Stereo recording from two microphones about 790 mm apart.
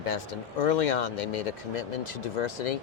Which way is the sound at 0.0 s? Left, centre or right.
Left.